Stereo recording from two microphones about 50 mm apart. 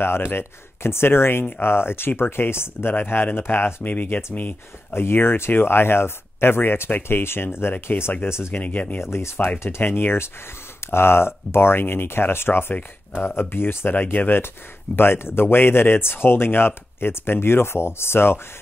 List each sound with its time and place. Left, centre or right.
0.0 s speech: left
3.8 s speech: left
4.9 s speech: left
7.9 s speech: left
8.3 s speech: left
8.5 s speech: left
9.1 s speech: left